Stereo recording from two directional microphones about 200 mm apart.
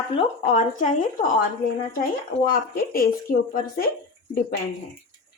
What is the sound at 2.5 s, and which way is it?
Speech, 45° left (ahead or behind).